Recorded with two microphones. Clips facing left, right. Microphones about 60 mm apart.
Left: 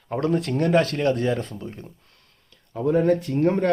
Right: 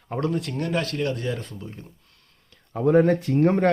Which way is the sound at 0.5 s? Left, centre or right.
Left.